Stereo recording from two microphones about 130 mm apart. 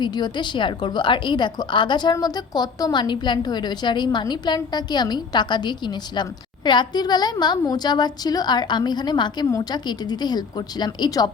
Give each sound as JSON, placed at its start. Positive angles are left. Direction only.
{"t": 0.0, "sound": "a woman's voice", "side_deg": 35}